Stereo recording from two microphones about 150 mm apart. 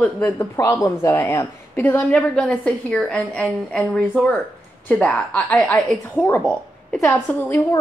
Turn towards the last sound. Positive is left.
turn(degrees=15)  # may be behind; listen again after turning